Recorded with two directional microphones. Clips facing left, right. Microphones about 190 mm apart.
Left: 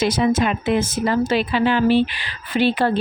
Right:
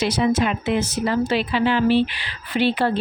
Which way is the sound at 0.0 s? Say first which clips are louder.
Left 2 dB; 45° left (ahead or behind).